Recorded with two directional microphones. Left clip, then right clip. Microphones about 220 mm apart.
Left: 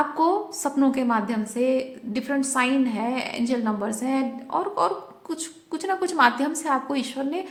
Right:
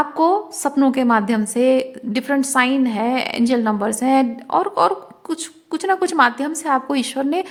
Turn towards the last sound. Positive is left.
turn(degrees=-35)  # may be behind; listen again after turning